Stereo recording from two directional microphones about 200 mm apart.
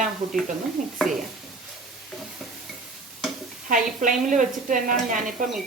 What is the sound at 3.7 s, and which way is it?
A woman's voice, 40° right (ahead or behind).